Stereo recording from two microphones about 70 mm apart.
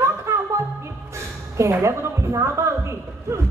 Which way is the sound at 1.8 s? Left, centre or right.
Right.